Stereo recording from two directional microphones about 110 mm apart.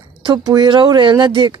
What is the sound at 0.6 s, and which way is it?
Speech, 45° right (ahead or behind).